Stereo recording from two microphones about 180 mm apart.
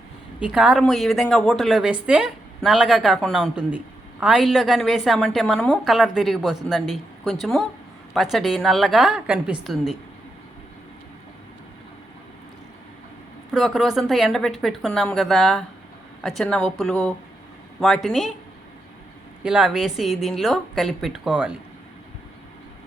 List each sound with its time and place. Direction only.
0.3 s a woman's voice: 5° right (ahead or behind)
13.5 s a woman's voice: centre (ahead or behind)
19.4 s a woman's voice: 5° right (ahead or behind)